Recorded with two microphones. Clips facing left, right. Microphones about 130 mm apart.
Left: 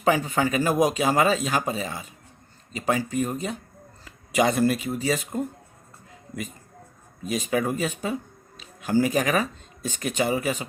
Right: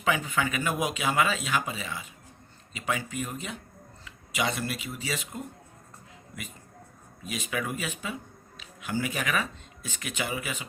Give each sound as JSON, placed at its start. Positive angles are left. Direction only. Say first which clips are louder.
{"t": 0.0, "sound": "speech", "louder": "left 6 dB", "side_deg": 35}
{"t": 7.2, "sound": "speech", "louder": "left 8 dB", "side_deg": 40}